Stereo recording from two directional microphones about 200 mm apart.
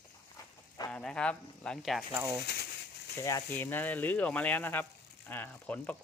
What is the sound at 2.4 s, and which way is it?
Speech, 55° left (ahead or behind).